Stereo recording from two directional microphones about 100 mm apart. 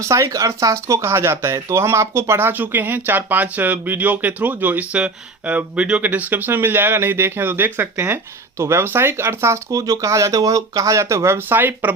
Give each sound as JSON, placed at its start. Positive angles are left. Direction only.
{"t": 0.0, "sound": "speech", "side_deg": -30}